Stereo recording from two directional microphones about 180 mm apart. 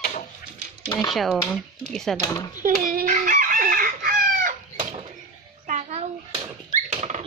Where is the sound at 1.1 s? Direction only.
Centre (ahead or behind).